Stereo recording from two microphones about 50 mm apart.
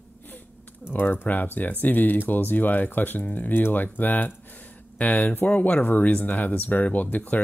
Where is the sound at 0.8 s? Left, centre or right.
Left.